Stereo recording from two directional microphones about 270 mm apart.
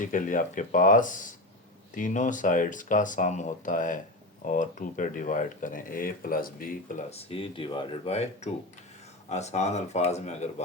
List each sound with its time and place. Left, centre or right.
0.0 s speech: left